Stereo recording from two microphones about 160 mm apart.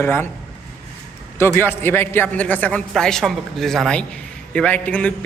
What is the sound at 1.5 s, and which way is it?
A man's voice, 15° left (ahead or behind).